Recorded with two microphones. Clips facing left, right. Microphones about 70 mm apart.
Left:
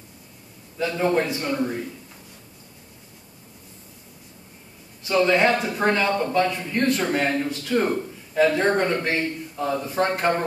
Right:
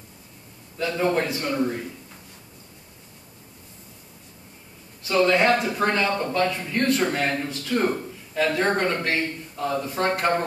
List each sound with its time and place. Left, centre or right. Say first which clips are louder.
0.9 s a man's voice: left 1 dB; centre
5.0 s a man's voice: even; centre
5.7 s a man's voice: left 1 dB; centre
6.2 s a man's voice: left 2 dB; left